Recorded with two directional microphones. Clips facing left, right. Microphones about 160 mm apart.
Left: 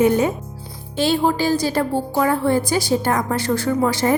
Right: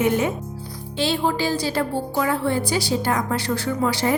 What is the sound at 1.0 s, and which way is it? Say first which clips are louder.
A woman's voice: left 4 dB; 45° left (ahead or behind).